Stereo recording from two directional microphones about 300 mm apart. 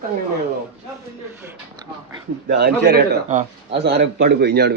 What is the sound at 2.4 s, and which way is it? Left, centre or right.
A man's voice, right.